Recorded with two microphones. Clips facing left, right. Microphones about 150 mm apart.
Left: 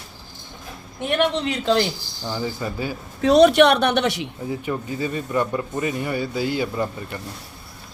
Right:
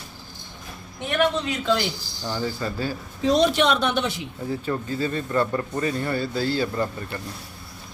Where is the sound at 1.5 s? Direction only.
35° left (ahead or behind).